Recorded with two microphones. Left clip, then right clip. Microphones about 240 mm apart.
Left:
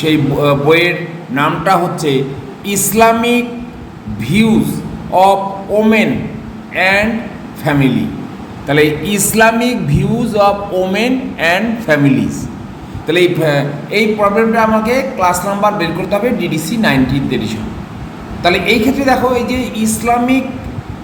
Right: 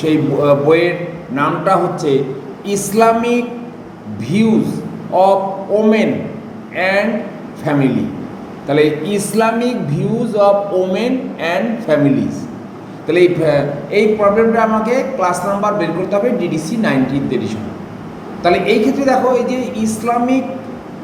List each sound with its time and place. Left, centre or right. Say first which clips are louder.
0.0 s a man's voice: left 1 dB; centre
13.1 s a man's voice: even; centre